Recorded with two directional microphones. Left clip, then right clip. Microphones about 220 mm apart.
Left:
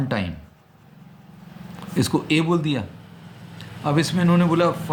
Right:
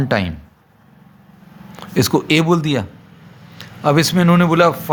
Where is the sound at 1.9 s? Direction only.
45° right (ahead or behind).